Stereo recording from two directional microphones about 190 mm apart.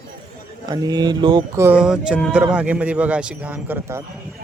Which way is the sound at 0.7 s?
20° right (ahead or behind).